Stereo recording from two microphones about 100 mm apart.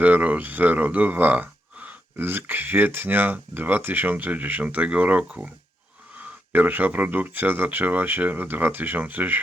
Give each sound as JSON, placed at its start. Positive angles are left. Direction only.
{"t": 0.0, "sound": "speech", "side_deg": -15}